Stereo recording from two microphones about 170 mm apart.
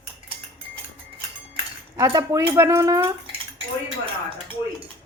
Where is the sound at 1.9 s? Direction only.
20° right (ahead or behind).